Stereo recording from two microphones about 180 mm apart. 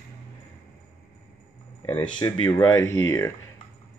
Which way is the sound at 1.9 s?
25° left (ahead or behind).